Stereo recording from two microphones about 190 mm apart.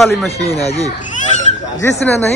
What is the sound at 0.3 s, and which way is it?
Speech, 35° left (ahead or behind).